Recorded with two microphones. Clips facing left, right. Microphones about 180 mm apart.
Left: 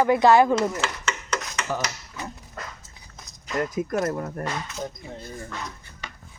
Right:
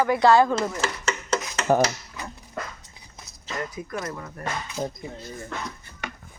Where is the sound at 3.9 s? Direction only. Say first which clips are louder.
Left 7 dB; 45° left (ahead or behind).